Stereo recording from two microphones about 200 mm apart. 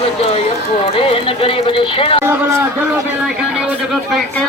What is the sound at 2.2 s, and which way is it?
A man's voice, 10° right (ahead or behind).